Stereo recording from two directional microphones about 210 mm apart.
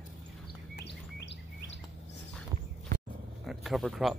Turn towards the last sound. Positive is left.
turn(degrees=0)  # may be behind; listen again after turning